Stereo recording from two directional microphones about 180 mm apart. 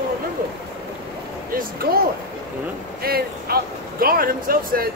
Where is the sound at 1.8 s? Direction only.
55° right (ahead or behind).